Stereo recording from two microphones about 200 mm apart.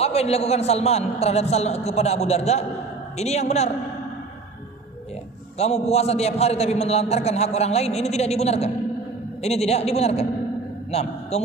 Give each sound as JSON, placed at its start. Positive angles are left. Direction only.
{"t": 0.0, "sound": "a man's voice", "side_deg": 30}
{"t": 5.9, "sound": "a man's voice", "side_deg": 30}